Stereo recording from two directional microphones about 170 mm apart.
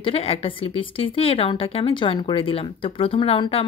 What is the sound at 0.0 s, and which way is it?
A woman's voice, 35° left (ahead or behind).